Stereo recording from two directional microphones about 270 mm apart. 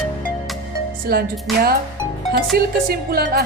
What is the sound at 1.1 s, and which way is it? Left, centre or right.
Music, right.